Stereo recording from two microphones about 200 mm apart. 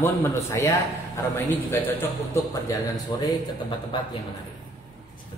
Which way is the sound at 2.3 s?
15° left (ahead or behind).